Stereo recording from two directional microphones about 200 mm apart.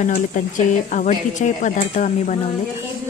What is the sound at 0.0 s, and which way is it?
A woman's voice, 40° left (ahead or behind).